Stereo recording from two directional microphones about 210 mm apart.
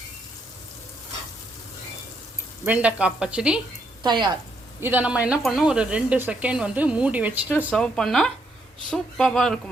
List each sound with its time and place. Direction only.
2.6 s speech: 5° right (ahead or behind)
4.0 s a woman's voice: 20° right (ahead or behind)
4.8 s speech: 10° right (ahead or behind)